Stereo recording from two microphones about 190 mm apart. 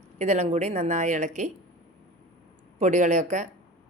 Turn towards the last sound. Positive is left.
turn(degrees=-40)  # may be behind; listen again after turning